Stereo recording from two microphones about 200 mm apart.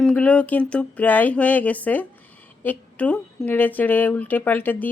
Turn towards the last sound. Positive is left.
turn(degrees=10)  # may be behind; listen again after turning